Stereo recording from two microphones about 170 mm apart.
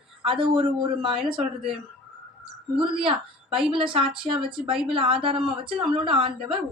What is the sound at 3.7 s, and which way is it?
A woman's voice, 30° right (ahead or behind).